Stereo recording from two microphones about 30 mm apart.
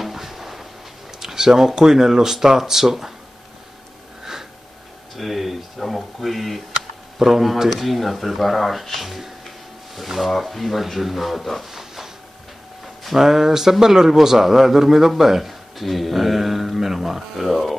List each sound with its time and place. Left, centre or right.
0.0 s a sound: centre
1.2 s a man's voice: centre
5.1 s a man's voice: centre
11.7 s a sound: centre
13.0 s a man's voice: centre
17.5 s speech: centre